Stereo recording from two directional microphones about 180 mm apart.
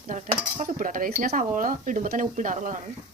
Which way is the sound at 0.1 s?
45° right (ahead or behind).